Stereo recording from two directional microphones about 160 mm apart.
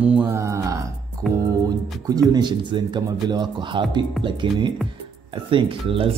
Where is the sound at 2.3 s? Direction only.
30° right (ahead or behind).